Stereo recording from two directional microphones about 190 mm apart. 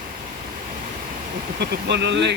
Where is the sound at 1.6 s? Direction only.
60° right (ahead or behind).